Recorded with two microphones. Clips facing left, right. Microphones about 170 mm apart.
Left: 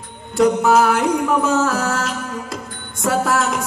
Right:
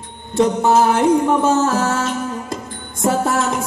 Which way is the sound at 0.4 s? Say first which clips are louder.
Even; 25° right (ahead or behind).